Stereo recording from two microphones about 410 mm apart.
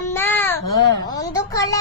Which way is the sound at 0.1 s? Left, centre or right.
Centre.